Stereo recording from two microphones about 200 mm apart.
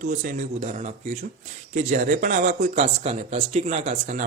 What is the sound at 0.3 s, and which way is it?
Speech, 40° right (ahead or behind).